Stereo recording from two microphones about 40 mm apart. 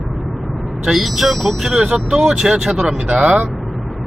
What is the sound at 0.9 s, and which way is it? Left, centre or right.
Speech, centre.